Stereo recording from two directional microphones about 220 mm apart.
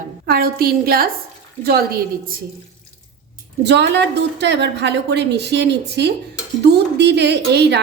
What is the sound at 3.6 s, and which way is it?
A woman's voice, 50° right (ahead or behind).